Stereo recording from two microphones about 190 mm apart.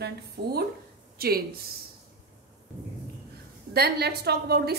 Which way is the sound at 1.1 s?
55° right (ahead or behind).